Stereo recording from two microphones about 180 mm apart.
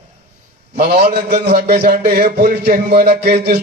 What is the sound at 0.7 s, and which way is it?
A man's voice, 60° right (ahead or behind).